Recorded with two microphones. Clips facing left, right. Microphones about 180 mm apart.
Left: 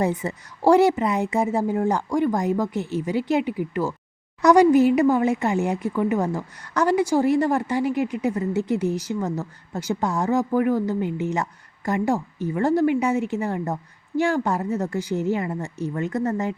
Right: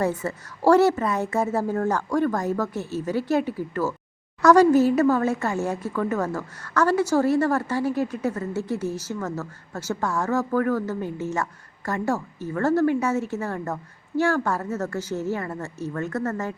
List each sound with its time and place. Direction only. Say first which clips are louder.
0.0 s speech: left 1 dB; 15° left (ahead or behind)